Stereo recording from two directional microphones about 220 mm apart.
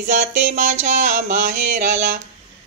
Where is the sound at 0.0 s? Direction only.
35° right (ahead or behind).